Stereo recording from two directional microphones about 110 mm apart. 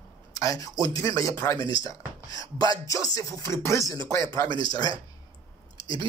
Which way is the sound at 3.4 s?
25° left (ahead or behind).